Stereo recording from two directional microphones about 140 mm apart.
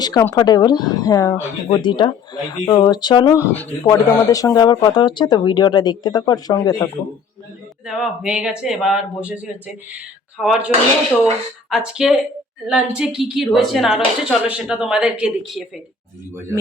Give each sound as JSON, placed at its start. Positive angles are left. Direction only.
{"t": 0.0, "sound": "speech", "side_deg": 30}
{"t": 1.9, "sound": "speech", "side_deg": 35}
{"t": 3.3, "sound": "speech", "side_deg": 15}
{"t": 3.8, "sound": "speech", "side_deg": 25}
{"t": 7.9, "sound": "a woman's voice", "side_deg": -5}
{"t": 11.7, "sound": "a woman's voice", "side_deg": -5}